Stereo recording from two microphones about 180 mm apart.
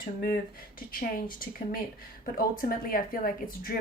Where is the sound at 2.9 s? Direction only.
55° left (ahead or behind).